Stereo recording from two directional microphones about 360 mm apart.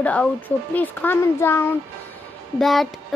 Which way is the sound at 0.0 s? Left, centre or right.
Centre.